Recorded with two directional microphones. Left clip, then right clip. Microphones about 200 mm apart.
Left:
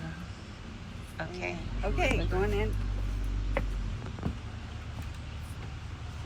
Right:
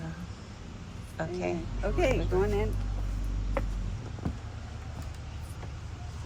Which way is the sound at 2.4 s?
50° right (ahead or behind).